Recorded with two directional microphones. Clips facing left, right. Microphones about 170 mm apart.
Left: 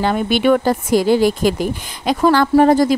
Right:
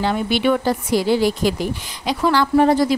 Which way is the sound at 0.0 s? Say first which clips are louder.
Left 3 dB; 50° left (ahead or behind).